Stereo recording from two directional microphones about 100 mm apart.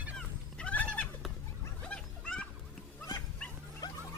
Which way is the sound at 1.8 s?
10° left (ahead or behind).